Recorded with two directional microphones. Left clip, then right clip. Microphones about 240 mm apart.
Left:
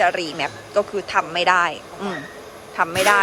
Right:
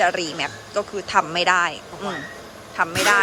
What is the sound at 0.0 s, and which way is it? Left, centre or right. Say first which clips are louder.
Speech: left 1 dB; centre.